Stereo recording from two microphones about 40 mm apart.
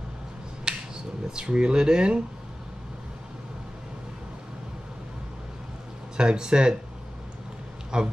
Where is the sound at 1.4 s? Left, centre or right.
Right.